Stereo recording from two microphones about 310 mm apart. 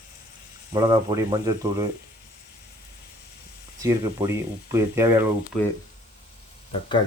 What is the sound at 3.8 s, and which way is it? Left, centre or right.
Speech, centre.